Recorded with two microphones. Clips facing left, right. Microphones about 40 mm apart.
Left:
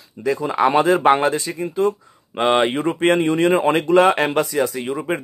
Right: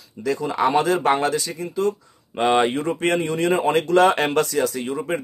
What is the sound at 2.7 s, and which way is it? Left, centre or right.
Speech, left.